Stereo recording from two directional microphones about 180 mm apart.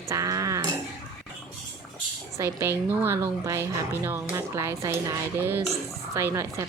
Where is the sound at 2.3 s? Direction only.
15° right (ahead or behind).